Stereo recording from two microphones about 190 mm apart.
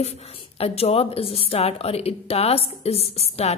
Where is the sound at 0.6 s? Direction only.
30° left (ahead or behind).